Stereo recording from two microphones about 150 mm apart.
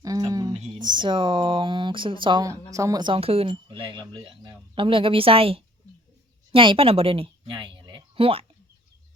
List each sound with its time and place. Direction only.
0.0 s a sound: 25° right (ahead or behind)
0.5 s speech: 35° right (ahead or behind)
2.5 s a woman's voice: 20° right (ahead or behind); by 8.4 s 40° right (ahead or behind)